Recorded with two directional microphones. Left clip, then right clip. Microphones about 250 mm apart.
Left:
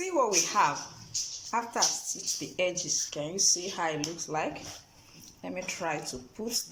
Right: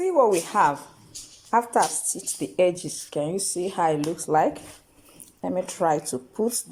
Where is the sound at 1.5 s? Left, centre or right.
Right.